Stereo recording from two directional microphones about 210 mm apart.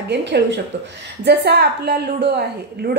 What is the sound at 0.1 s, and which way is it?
A woman's voice, 55° right (ahead or behind).